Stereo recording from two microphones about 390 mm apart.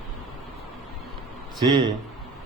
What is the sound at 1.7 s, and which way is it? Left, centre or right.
Speech, right.